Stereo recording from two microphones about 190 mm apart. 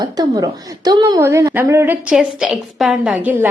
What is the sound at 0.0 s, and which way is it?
A woman's voice, 20° right (ahead or behind).